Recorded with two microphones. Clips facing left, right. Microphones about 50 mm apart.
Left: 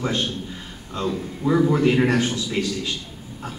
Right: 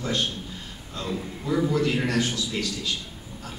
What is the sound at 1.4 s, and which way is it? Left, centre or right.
A man's voice, left.